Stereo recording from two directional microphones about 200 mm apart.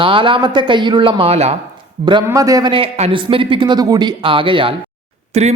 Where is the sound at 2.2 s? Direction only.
15° right (ahead or behind).